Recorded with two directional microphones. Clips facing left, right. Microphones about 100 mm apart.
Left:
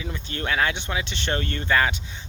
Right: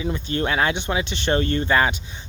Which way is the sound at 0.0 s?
20° right (ahead or behind).